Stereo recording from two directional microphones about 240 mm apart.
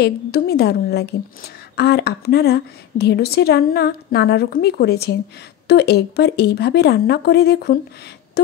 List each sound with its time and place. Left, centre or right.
0.0 s a woman's voice: left